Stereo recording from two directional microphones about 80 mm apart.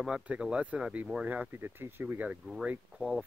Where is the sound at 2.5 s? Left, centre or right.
Centre.